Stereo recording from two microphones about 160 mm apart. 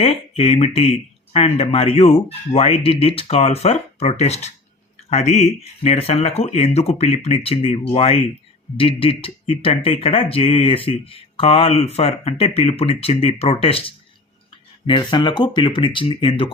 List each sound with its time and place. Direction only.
0.0 s speech: 40° left (ahead or behind)